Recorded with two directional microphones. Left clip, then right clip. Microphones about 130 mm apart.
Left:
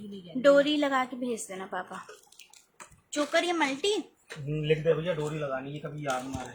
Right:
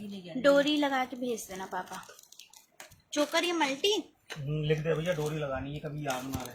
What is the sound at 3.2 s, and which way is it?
Speech, 10° left (ahead or behind).